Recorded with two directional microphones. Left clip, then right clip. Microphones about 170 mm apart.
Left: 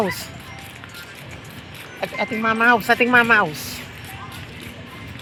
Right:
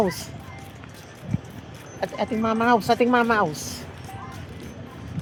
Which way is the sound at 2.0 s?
20° right (ahead or behind).